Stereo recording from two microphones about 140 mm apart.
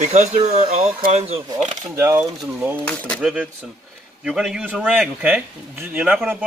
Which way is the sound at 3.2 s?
5° right (ahead or behind).